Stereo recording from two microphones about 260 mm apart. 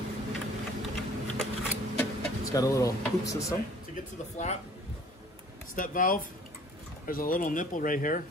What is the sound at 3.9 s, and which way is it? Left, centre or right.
Speech, left.